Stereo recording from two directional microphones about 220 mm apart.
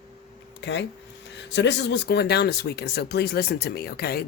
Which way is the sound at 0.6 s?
55° left (ahead or behind).